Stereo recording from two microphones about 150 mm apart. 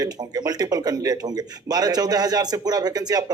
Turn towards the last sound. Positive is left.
turn(degrees=-25)  # may be behind; listen again after turning